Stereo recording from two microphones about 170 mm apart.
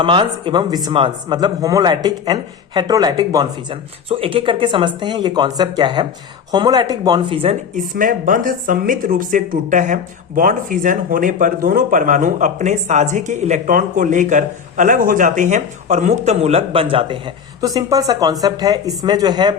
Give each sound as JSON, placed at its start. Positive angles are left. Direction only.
{"t": 0.0, "sound": "a man's voice", "side_deg": -30}
{"t": 7.8, "sound": "a man's voice", "side_deg": -50}